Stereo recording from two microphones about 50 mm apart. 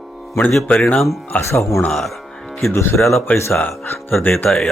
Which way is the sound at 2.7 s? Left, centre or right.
Left.